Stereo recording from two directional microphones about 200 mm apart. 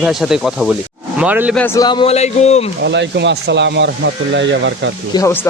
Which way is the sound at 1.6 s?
15° left (ahead or behind).